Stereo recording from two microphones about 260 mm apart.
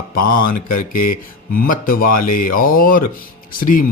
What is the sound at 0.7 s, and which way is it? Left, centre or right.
Speech, left.